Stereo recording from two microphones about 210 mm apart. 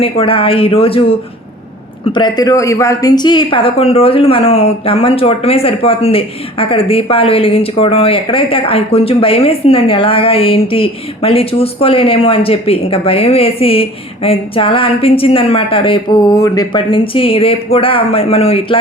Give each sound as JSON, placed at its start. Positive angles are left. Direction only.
{"t": 0.0, "sound": "a woman's voice", "side_deg": 25}
{"t": 2.1, "sound": "a woman's voice", "side_deg": 20}